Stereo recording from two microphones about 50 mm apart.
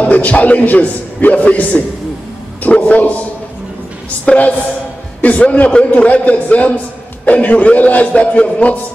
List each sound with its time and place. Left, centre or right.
0.0 s a man's voice: left
4.3 s a man's voice: centre